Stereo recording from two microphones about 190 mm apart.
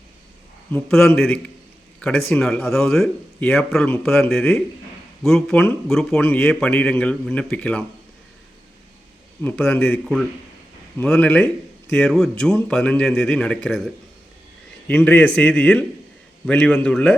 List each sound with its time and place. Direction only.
0.7 s a man's voice: 5° left (ahead or behind)
9.4 s a man's voice: 5° left (ahead or behind)
14.8 s a man's voice: 10° left (ahead or behind)